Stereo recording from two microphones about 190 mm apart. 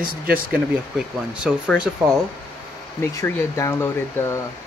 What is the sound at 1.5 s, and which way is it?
Speech, 5° right (ahead or behind).